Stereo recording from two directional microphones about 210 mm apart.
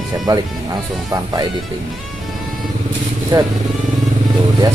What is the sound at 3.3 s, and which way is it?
Speech, 15° right (ahead or behind).